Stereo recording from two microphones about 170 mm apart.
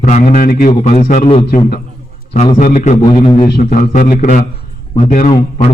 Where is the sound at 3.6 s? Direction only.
50° left (ahead or behind).